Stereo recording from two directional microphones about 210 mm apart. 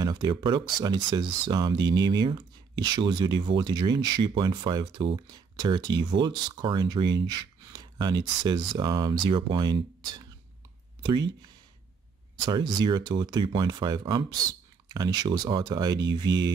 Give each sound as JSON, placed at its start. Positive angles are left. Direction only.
{"t": 0.0, "sound": "speech", "side_deg": -20}
{"t": 12.4, "sound": "speech", "side_deg": -20}